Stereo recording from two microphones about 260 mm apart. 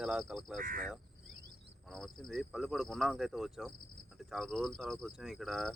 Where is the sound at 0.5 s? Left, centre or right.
Right.